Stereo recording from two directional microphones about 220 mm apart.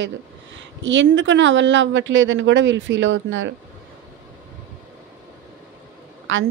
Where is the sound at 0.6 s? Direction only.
55° right (ahead or behind).